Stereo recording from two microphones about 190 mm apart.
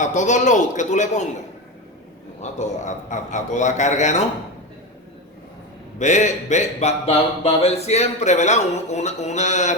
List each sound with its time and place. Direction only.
0.0 s speech: 40° left (ahead or behind)
2.4 s speech: 40° left (ahead or behind)
6.0 s speech: 40° left (ahead or behind)